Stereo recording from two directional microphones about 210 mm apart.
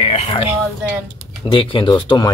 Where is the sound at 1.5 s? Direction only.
25° left (ahead or behind).